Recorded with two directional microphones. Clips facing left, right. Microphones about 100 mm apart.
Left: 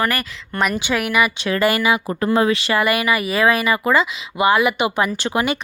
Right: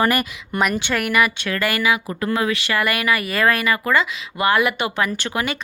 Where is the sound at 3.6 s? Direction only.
25° left (ahead or behind).